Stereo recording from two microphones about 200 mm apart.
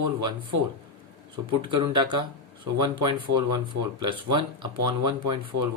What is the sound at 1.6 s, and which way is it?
Speech, 25° right (ahead or behind).